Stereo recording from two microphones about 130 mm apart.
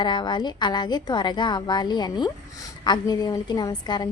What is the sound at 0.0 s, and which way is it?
A woman's voice, 35° left (ahead or behind).